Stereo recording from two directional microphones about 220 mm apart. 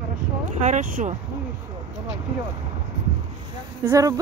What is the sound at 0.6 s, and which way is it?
Speech, 35° right (ahead or behind).